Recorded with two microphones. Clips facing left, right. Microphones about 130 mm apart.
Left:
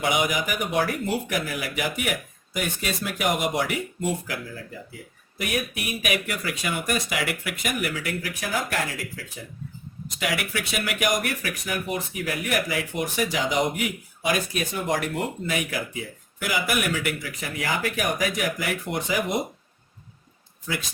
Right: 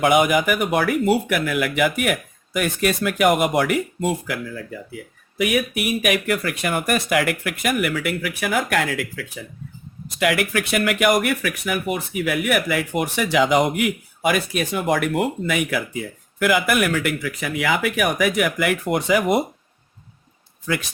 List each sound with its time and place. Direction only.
0.0 s speech: 55° right (ahead or behind)
5.4 s speech: 75° right (ahead or behind); by 15.0 s 60° right (ahead or behind)
16.4 s speech: 55° right (ahead or behind)
17.4 s speech: 70° right (ahead or behind)